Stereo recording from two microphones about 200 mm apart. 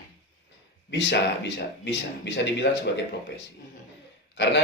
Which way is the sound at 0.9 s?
65° left (ahead or behind).